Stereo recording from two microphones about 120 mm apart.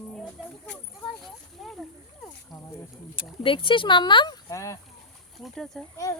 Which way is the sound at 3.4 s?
45° left (ahead or behind).